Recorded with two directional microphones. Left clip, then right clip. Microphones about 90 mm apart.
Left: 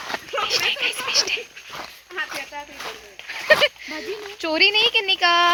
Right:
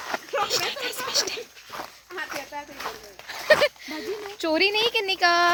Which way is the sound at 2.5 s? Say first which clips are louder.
Left 2 dB; 45° right (ahead or behind).